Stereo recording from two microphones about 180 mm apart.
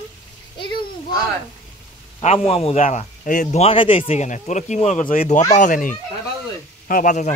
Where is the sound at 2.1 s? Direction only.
30° left (ahead or behind).